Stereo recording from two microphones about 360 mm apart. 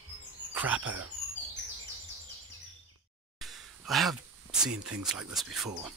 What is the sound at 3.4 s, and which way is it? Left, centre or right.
Speech, centre.